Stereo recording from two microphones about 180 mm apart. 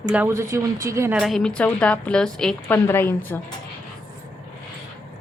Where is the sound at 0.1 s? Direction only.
10° right (ahead or behind).